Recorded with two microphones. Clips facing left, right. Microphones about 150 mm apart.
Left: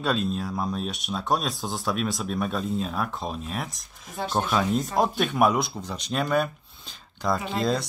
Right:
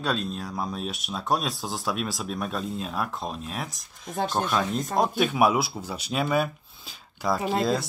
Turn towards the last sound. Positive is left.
turn(degrees=0)  # may be behind; listen again after turning